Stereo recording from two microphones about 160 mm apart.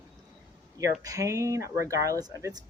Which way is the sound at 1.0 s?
20° right (ahead or behind).